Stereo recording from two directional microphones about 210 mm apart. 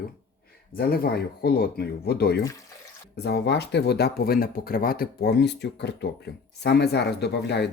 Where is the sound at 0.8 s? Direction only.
45° left (ahead or behind).